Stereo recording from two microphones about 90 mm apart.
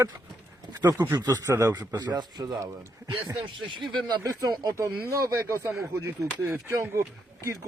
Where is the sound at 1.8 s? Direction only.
50° right (ahead or behind).